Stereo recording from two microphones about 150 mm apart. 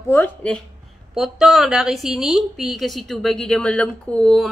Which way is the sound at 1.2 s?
Centre (ahead or behind).